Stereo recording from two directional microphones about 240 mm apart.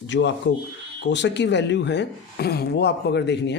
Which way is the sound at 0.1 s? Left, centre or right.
Left.